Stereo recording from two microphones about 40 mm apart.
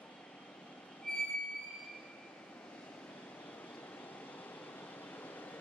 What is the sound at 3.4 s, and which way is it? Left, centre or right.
Vehicle, left.